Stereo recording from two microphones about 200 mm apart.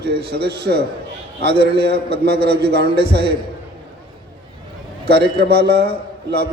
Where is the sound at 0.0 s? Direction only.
55° right (ahead or behind).